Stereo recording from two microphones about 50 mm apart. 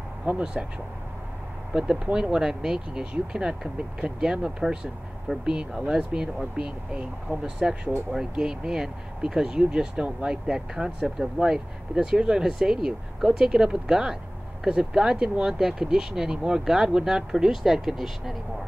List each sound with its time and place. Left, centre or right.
0.2 s speech: right
1.7 s speech: centre
8.1 s speech: centre